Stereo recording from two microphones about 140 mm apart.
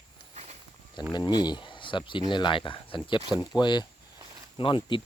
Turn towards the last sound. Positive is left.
turn(degrees=35)  # may be behind; listen again after turning